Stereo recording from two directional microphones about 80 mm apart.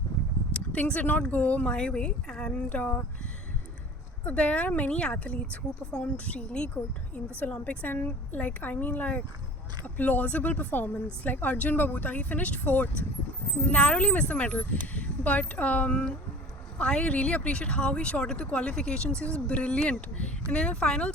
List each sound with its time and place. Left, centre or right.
0.5 s speech: centre
4.2 s speech: centre